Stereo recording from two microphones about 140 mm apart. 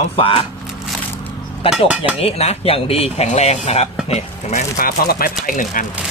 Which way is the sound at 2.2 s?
45° left (ahead or behind).